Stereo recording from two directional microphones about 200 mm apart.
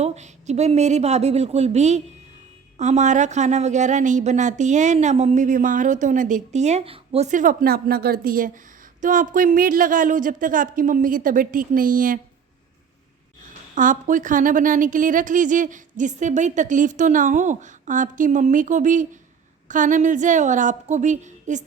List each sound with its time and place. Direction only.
0.0 s speech: 35° right (ahead or behind)
13.4 s speech: 40° right (ahead or behind)